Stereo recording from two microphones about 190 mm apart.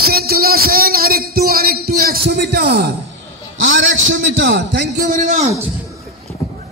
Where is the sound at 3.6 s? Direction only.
80° right.